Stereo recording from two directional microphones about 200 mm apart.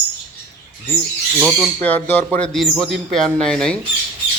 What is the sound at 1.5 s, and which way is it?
Speech, 5° left (ahead or behind).